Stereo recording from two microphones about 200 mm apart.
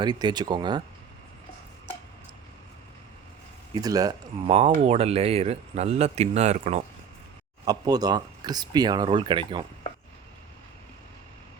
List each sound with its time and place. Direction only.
0.0 s speech: 20° right (ahead or behind)
3.8 s speech: 20° right (ahead or behind); by 6.8 s 35° right (ahead or behind)
7.6 s speech: 20° right (ahead or behind)